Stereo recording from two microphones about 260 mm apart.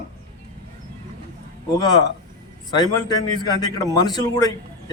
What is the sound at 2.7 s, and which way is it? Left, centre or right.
A man's voice, centre.